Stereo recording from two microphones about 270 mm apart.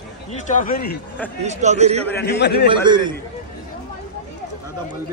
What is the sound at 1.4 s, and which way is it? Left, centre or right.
Speech, right.